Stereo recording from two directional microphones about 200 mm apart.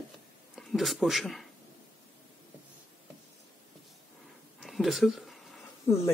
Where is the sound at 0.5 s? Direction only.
Centre (ahead or behind).